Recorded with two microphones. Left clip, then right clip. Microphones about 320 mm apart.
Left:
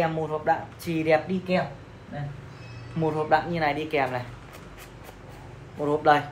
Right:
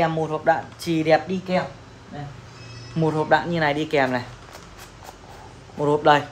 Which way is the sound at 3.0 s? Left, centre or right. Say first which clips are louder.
Right 3 dB; right.